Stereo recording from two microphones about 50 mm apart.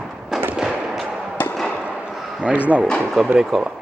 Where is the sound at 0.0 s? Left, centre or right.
Centre.